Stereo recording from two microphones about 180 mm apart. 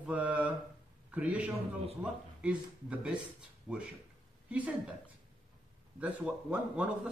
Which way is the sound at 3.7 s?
15° right (ahead or behind).